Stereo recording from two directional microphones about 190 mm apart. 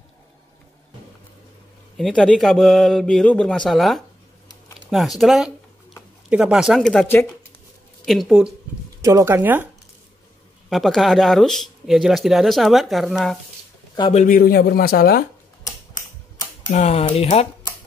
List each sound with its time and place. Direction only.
2.0 s speech: centre (ahead or behind)
10.7 s speech: centre (ahead or behind)
14.1 s a man's voice: 45° left (ahead or behind)
16.7 s speech: 35° left (ahead or behind)